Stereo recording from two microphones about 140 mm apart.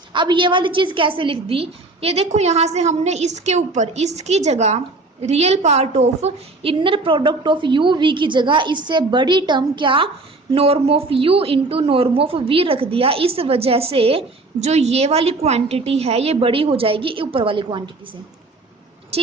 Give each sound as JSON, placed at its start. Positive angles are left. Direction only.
{"t": 0.1, "sound": "a woman's voice", "side_deg": -35}
{"t": 19.1, "sound": "speech", "side_deg": -45}